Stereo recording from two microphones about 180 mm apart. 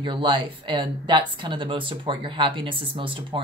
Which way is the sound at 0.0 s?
25° right (ahead or behind).